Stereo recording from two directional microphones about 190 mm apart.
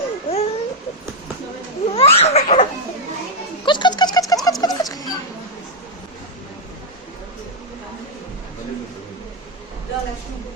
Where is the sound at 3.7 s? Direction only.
25° left (ahead or behind).